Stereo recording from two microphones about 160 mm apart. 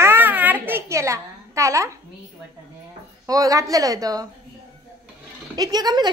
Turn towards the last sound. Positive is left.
turn(degrees=-25)  # may be behind; listen again after turning